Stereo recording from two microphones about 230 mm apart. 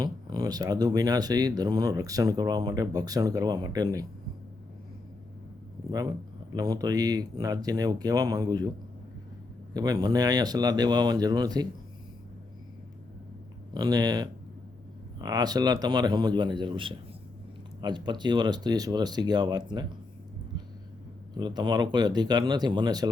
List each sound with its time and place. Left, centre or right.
0.0 s speech: centre
5.9 s speech: centre
9.7 s speech: centre
13.7 s speech: centre
21.3 s speech: centre